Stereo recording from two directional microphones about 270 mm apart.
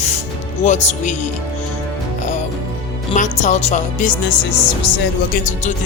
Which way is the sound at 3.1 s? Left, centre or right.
Left.